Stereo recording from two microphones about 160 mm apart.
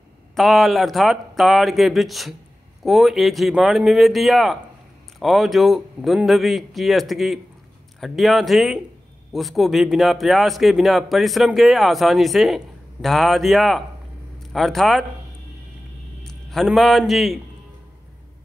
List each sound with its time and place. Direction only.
0.4 s a man's voice: centre (ahead or behind)
16.3 s a man's voice: centre (ahead or behind)